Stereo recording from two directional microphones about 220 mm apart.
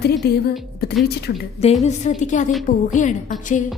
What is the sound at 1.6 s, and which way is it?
A woman's voice, 30° left (ahead or behind).